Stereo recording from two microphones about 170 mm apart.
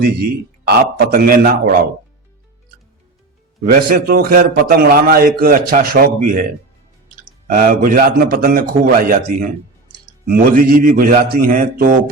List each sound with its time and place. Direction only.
0.7 s a man's voice: 65° right (ahead or behind)
3.7 s a man's voice: 60° right (ahead or behind)
7.4 s a man's voice: 60° right (ahead or behind)